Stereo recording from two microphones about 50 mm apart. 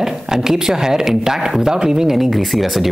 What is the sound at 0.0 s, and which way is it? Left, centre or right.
Speech, centre.